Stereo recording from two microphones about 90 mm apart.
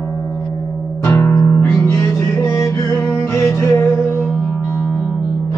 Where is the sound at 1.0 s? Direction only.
30° left (ahead or behind).